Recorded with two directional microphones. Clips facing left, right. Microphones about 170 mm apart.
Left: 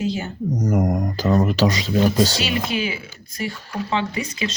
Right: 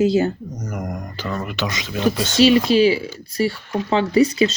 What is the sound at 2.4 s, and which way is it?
Speech, 30° right (ahead or behind).